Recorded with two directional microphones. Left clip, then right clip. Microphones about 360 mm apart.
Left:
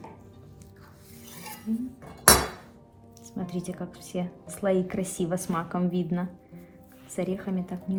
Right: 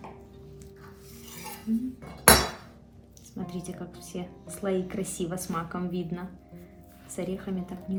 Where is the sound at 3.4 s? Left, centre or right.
Centre.